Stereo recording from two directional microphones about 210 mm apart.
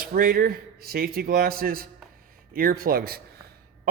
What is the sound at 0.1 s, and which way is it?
Speech, 45° right (ahead or behind).